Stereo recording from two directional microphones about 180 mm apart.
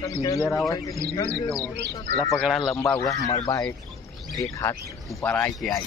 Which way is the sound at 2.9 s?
20° left (ahead or behind).